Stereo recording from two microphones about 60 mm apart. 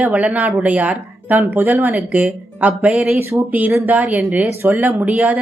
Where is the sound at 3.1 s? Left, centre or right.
Right.